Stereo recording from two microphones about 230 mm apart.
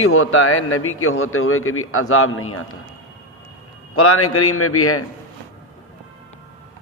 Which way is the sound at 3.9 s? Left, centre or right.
Left.